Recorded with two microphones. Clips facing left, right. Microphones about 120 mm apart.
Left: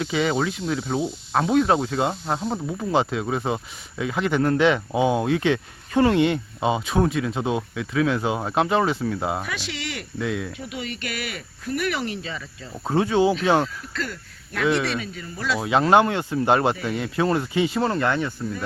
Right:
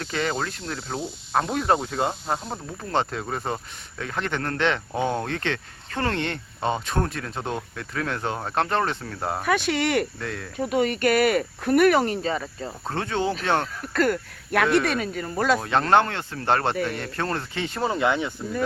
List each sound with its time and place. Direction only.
0.0 s speech: 5° left (ahead or behind)
9.4 s speech: 50° right (ahead or behind)
10.2 s speech: 5° left (ahead or behind)
10.6 s speech: 45° right (ahead or behind)
12.8 s speech: 10° left (ahead or behind)
13.9 s speech: 60° right (ahead or behind)
14.8 s speech: 50° right (ahead or behind)
15.6 s speech: 10° left (ahead or behind)
17.7 s speech: 10° right (ahead or behind)